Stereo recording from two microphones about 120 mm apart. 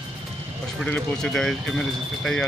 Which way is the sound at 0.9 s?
10° left (ahead or behind).